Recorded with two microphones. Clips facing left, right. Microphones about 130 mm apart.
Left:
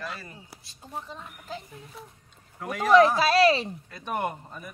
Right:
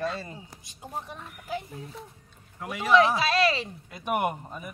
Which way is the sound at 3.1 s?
35° left (ahead or behind).